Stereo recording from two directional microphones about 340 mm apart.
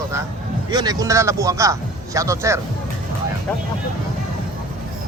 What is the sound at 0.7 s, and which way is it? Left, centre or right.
A man's voice, centre.